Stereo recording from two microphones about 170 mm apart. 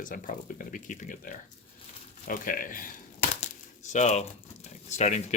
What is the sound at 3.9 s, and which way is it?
Speech, 45° left (ahead or behind).